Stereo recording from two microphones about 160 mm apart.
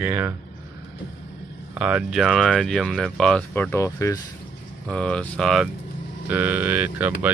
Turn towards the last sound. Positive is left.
turn(degrees=-10)  # may be behind; listen again after turning